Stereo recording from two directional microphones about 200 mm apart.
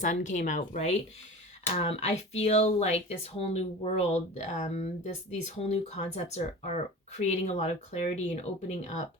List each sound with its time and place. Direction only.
0.0 s speech: 40° left (ahead or behind)